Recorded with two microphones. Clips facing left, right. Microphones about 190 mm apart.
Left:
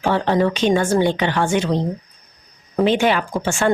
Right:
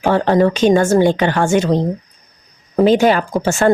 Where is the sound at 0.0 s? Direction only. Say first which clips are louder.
Right 4 dB; 45° right (ahead or behind).